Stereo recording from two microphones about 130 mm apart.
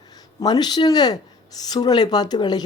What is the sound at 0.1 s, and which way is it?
Speech, 30° left (ahead or behind).